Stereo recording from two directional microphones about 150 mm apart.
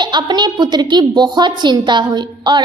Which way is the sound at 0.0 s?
30° right (ahead or behind).